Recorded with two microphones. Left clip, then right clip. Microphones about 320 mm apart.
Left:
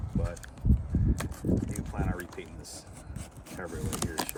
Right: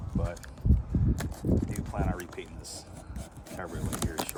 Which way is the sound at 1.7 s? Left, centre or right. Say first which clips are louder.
Right 2 dB; centre.